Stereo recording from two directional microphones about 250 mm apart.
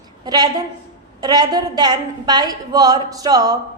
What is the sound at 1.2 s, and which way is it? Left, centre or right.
A woman's voice, centre.